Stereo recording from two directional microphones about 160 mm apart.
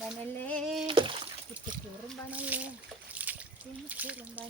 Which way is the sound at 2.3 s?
10° right (ahead or behind).